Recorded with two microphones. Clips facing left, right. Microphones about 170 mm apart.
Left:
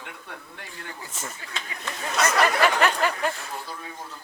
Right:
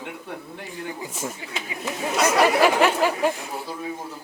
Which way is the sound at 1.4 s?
15° right (ahead or behind).